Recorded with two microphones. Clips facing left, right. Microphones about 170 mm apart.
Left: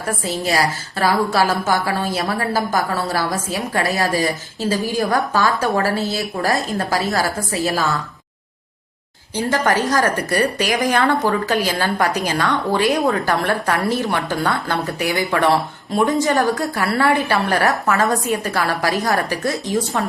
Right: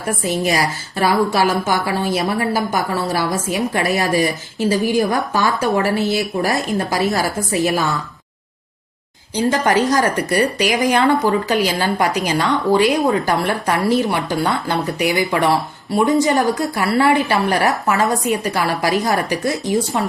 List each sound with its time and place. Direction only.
0.3 s a woman's voice: 15° right (ahead or behind)
9.3 s a woman's voice: 15° right (ahead or behind)